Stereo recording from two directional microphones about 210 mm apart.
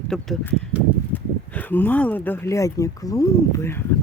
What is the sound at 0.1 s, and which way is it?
Speech, centre (ahead or behind).